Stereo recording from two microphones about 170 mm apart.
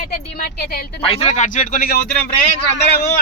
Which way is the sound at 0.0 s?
60° left (ahead or behind).